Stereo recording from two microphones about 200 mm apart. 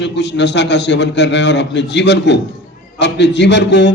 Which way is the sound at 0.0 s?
60° left (ahead or behind).